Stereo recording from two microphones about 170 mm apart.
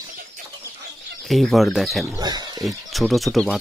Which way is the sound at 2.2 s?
25° right (ahead or behind).